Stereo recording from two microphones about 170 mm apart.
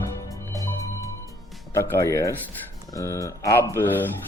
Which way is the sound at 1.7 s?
15° left (ahead or behind).